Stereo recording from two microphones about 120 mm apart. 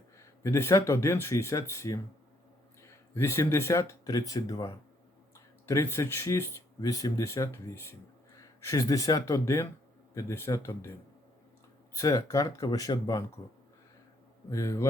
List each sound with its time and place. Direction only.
0.2 s speech: 25° left (ahead or behind)
3.2 s speech: 25° left (ahead or behind)
11.9 s speech: 30° left (ahead or behind)
14.5 s speech: 30° left (ahead or behind)